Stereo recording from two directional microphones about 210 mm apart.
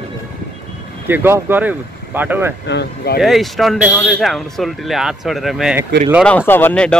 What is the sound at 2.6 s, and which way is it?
Speech, 50° left (ahead or behind).